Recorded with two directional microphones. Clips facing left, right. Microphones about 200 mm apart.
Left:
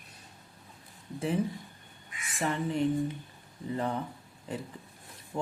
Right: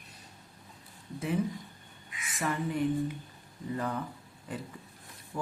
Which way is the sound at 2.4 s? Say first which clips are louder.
Left 1 dB; 30° left (ahead or behind).